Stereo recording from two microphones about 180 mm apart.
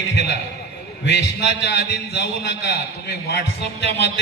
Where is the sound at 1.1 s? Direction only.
65° left (ahead or behind).